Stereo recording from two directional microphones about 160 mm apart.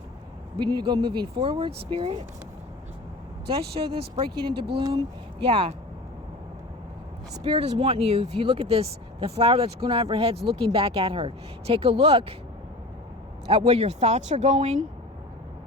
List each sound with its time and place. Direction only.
0.6 s speech: 30° right (ahead or behind)
3.8 s speech: 35° right (ahead or behind)
7.4 s speech: 40° right (ahead or behind)
9.4 s speech: 30° right (ahead or behind)
13.5 s speech: 35° right (ahead or behind)